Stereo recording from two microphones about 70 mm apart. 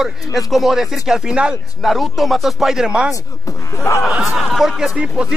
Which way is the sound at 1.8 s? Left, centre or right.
Centre.